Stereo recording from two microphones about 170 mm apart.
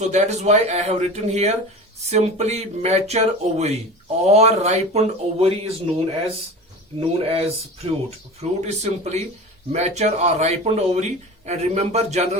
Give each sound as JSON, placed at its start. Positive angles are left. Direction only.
{"t": 0.1, "sound": "speech", "side_deg": -40}